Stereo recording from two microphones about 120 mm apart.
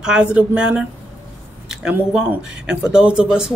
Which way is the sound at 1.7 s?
5° right (ahead or behind).